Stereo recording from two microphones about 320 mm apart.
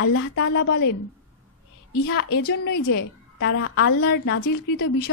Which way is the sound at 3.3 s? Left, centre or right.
Left.